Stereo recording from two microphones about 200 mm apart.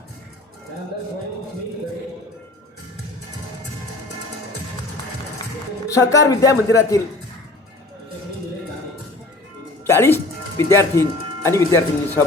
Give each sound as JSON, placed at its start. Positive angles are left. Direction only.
{"t": 5.9, "sound": "speech", "side_deg": 15}
{"t": 9.8, "sound": "music", "side_deg": 15}
{"t": 10.7, "sound": "speech", "side_deg": 15}